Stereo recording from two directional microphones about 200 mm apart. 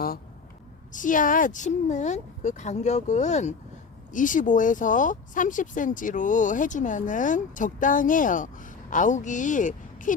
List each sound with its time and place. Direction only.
0.9 s speech: 40° left (ahead or behind)